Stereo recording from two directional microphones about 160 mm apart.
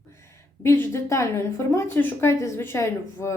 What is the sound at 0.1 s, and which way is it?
A woman's voice, 15° left (ahead or behind).